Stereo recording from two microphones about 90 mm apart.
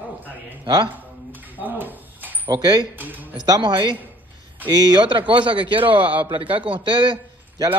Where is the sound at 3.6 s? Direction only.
65° right (ahead or behind).